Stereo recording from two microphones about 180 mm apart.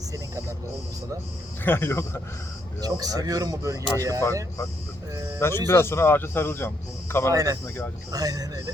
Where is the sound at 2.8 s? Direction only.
20° right (ahead or behind).